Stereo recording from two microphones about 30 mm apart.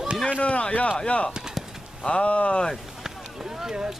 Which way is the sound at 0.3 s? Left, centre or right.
Left.